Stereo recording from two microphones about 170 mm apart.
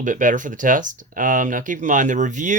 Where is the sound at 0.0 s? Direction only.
50° right (ahead or behind).